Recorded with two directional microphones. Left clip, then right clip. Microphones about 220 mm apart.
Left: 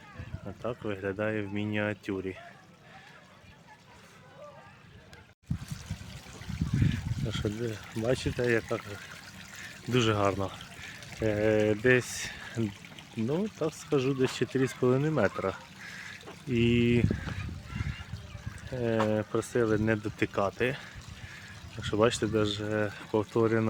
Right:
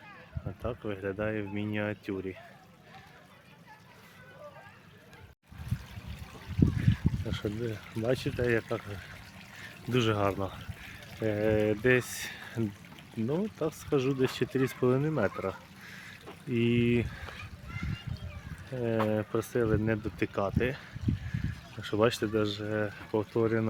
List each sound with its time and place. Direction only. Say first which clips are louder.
0.6 s speech: left 1 dB; 5° left (ahead or behind)
6.5 s water: right 9 dB; 45° left (ahead or behind)
6.9 s a sound: right 2 dB; 45° left (ahead or behind)
7.4 s speech: even; 50° left (ahead or behind)
8.0 s speech: left 1 dB; centre (ahead or behind)
9.9 s speech: left 2 dB; 5° left (ahead or behind)
10.6 s a sound: left 3 dB; 40° left (ahead or behind)
11.2 s speech: left 2 dB; 5° left (ahead or behind)
18.7 s speech: left 1 dB; 5° left (ahead or behind)